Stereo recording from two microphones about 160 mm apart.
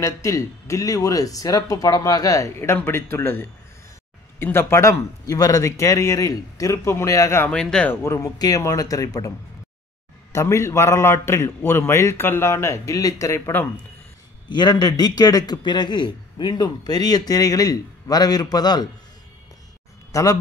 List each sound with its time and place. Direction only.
0.0 s a man's voice: 20° left (ahead or behind)
7.5 s a man's voice: 5° left (ahead or behind); by 9.3 s 20° left (ahead or behind)
10.3 s a man's voice: 15° left (ahead or behind)
14.5 s a man's voice: 25° left (ahead or behind)
20.1 s speech: 20° left (ahead or behind)